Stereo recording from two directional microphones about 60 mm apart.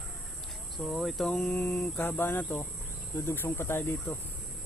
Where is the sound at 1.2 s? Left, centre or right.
Centre.